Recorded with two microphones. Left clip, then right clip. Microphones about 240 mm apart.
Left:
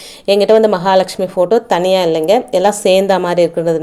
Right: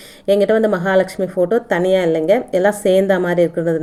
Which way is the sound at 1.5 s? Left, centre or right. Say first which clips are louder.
Left 3 dB; centre.